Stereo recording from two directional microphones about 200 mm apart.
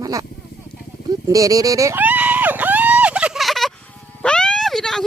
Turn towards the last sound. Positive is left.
turn(degrees=0)  # may be behind; listen again after turning